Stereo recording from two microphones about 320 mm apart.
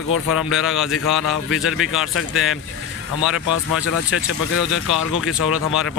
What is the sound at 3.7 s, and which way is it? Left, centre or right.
Speech, left.